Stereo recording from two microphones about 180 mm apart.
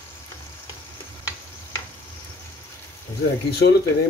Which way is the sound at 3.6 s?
90° left.